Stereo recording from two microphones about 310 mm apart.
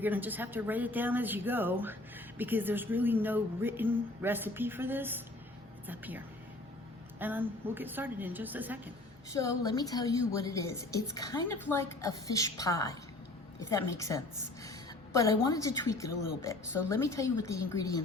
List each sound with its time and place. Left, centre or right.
0.0 s a woman's voice: centre
9.3 s a woman's voice: centre